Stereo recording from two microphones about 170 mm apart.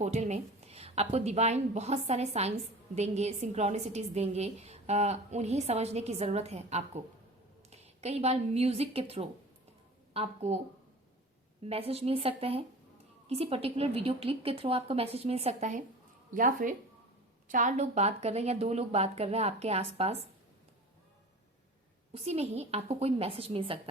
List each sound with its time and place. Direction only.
0.0 s a woman's voice: 40° right (ahead or behind)
11.6 s a woman's voice: 35° right (ahead or behind)
22.1 s a woman's voice: 40° right (ahead or behind)